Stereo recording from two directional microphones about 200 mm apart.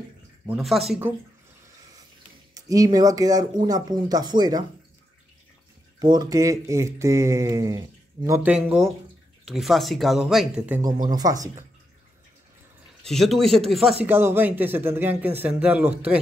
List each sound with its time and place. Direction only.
0.5 s speech: centre (ahead or behind)
2.5 s speech: 15° right (ahead or behind)
6.1 s speech: 15° right (ahead or behind)
10.8 s speech: 20° right (ahead or behind)
13.0 s speech: centre (ahead or behind)
14.0 s speech: 10° right (ahead or behind)